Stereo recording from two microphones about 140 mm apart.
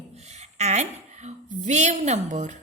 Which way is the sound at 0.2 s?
55° right (ahead or behind).